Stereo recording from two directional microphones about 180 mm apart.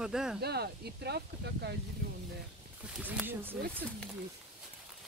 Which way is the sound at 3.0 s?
10° right (ahead or behind).